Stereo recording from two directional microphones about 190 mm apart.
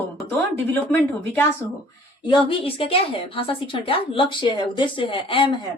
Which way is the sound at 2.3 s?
30° left (ahead or behind).